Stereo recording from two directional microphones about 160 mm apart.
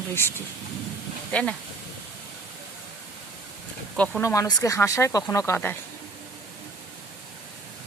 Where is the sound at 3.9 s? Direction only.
10° left (ahead or behind).